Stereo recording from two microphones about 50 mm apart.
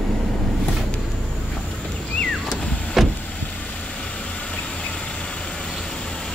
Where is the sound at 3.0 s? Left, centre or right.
Centre.